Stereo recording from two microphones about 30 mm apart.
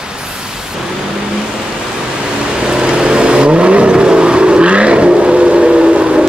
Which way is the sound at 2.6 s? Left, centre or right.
Right.